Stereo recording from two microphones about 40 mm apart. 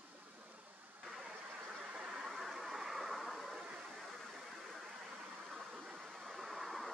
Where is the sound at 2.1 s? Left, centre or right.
Centre.